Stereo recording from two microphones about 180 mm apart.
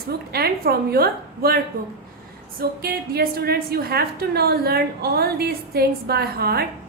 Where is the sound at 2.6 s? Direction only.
60° right (ahead or behind).